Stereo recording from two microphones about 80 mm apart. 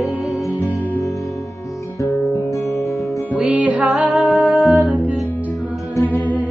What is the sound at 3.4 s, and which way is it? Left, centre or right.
Music, centre.